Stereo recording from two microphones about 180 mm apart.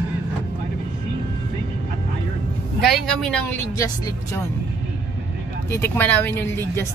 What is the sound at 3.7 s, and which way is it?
Speech, 20° left (ahead or behind).